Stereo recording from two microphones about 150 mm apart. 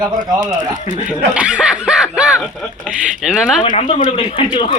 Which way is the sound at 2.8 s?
Centre (ahead or behind).